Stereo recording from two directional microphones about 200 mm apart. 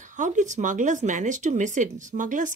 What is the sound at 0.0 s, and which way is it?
Speech, 40° right (ahead or behind).